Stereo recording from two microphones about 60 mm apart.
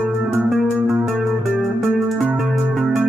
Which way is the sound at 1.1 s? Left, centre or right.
Centre.